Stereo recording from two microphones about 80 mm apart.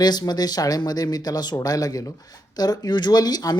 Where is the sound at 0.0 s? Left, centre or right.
Left.